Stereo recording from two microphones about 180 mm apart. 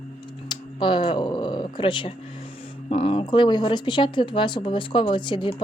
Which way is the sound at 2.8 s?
30° left (ahead or behind).